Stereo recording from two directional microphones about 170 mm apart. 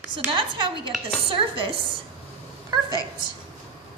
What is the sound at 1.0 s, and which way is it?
Chopping, 30° right (ahead or behind).